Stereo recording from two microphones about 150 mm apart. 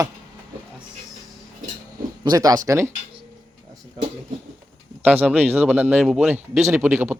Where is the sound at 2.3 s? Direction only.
25° right (ahead or behind).